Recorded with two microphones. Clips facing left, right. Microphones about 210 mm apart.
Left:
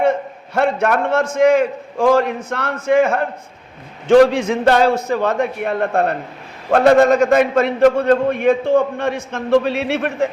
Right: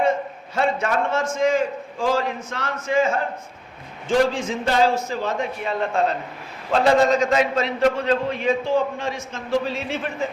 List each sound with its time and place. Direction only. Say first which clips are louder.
0.5 s a man's voice: left 5 dB; 60° left (ahead or behind)